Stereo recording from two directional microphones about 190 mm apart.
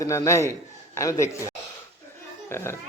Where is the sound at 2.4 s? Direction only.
15° left (ahead or behind).